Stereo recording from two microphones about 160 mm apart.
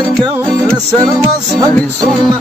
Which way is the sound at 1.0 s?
20° right (ahead or behind).